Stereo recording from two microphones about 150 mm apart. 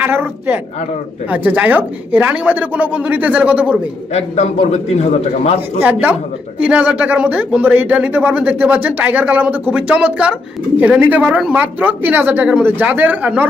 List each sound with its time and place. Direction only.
0.0 s speech: 15° right (ahead or behind)
4.1 s a man's voice: 45° left (ahead or behind)
5.8 s speech: 10° right (ahead or behind)